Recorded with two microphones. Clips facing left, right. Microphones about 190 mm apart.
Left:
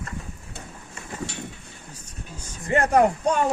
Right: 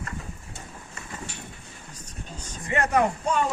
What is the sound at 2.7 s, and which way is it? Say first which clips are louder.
Speech: left 4 dB; 35° left (ahead or behind).